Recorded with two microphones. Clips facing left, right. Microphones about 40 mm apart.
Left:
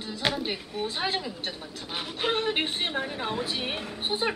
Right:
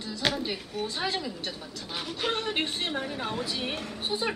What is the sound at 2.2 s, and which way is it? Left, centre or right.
A woman's voice, left.